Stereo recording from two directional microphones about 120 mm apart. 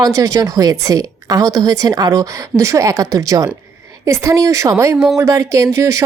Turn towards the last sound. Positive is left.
turn(degrees=-25)  # may be behind; listen again after turning